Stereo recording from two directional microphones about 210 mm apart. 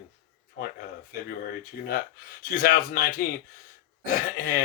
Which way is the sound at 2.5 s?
40° left (ahead or behind).